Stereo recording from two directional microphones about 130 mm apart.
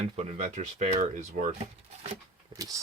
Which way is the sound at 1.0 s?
75° right (ahead or behind).